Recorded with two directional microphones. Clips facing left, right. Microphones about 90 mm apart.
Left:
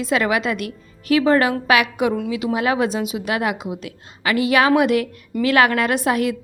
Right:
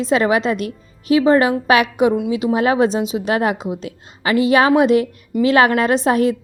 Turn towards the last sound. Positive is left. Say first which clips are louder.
# right 4 dB
turn(degrees=-30)  # may be behind; listen again after turning